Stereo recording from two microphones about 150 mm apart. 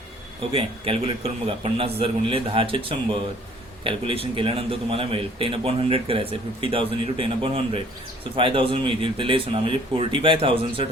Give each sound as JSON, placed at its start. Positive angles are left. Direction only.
{"t": 0.5, "sound": "a man's voice", "side_deg": -40}